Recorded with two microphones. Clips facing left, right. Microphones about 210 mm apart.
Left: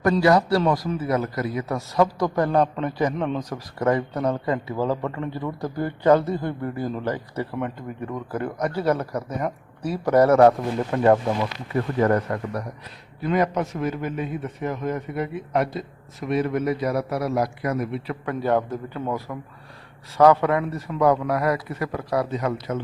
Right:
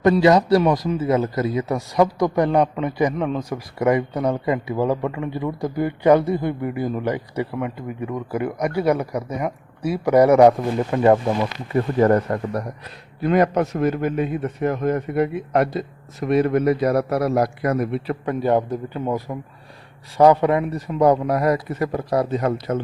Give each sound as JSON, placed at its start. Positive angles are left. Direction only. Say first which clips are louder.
{"t": 0.0, "sound": "a man's voice", "louder": "right 3 dB", "side_deg": -20}
{"t": 11.7, "sound": "a man's voice", "louder": "right 4 dB", "side_deg": -30}
{"t": 13.2, "sound": "a man's voice", "louder": "right 5 dB", "side_deg": -60}
{"t": 18.3, "sound": "a man's voice", "louder": "right 3 dB", "side_deg": -15}